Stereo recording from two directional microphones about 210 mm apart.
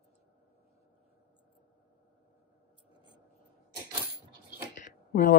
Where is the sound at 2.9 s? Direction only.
25° left (ahead or behind).